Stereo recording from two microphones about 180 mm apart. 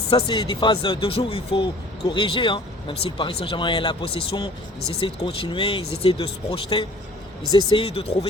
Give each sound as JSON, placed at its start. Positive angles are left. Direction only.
{"t": 0.1, "sound": "speech", "side_deg": 25}